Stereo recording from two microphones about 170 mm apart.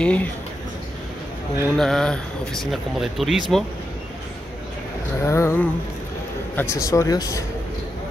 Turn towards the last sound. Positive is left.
turn(degrees=20)  # may be behind; listen again after turning